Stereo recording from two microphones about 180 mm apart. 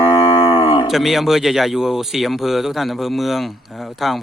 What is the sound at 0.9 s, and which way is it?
Speech, centre (ahead or behind).